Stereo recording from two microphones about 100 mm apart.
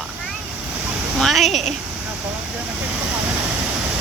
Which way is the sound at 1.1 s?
Centre (ahead or behind).